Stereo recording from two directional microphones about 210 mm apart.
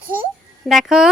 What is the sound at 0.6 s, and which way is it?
Speech, centre (ahead or behind).